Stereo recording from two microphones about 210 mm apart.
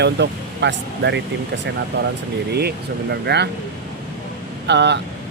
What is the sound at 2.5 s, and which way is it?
Speech, 50° right (ahead or behind).